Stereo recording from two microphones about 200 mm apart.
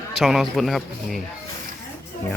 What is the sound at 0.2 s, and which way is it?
Speech, centre (ahead or behind).